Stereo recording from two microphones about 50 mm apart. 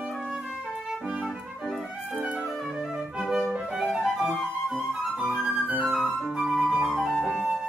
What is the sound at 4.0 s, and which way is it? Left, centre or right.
Music, centre.